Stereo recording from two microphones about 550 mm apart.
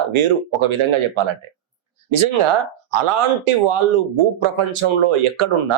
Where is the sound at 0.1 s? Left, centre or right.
Right.